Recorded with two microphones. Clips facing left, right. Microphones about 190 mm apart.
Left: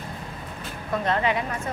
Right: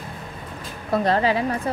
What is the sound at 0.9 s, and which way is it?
Speech, 35° right (ahead or behind).